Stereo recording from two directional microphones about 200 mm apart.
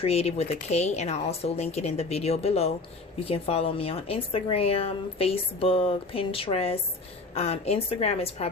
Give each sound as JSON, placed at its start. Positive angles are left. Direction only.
{"t": 0.0, "sound": "a woman's voice", "side_deg": 30}